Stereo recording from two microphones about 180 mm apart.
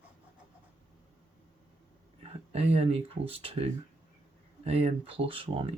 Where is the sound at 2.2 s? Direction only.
35° right (ahead or behind).